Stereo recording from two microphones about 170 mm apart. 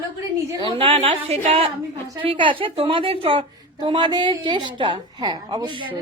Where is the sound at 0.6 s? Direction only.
30° right (ahead or behind).